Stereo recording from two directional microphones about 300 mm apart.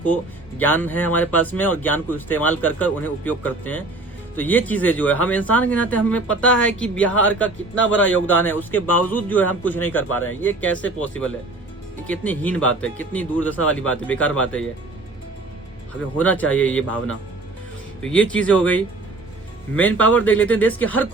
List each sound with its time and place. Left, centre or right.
0.6 s speech: centre
7.8 s a man's voice: left
8.1 s speech: centre
12.0 s speech: centre
16.1 s speech: centre